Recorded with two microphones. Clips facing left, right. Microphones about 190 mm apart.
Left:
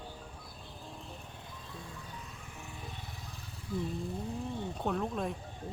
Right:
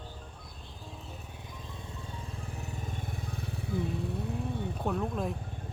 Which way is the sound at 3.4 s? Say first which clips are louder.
Right 2 dB; 65° right (ahead or behind).